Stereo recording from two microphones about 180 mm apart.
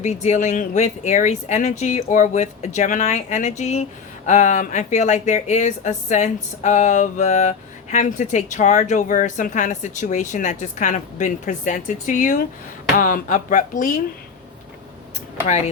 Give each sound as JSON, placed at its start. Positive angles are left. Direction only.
{"t": 0.0, "sound": "speech", "side_deg": 40}
{"t": 15.4, "sound": "speech", "side_deg": 40}